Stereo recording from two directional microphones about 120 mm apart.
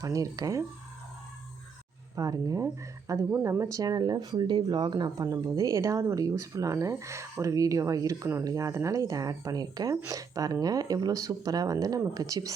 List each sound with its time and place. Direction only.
0.0 s speech: 30° right (ahead or behind)
2.1 s speech: 30° right (ahead or behind)